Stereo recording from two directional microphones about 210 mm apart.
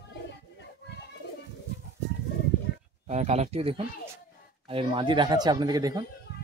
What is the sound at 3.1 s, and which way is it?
Speech, 30° right (ahead or behind).